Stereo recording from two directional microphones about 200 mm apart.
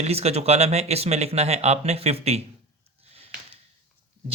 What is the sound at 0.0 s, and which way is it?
Speech, 30° right (ahead or behind).